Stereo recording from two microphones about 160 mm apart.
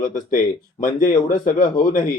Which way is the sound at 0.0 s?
55° left (ahead or behind).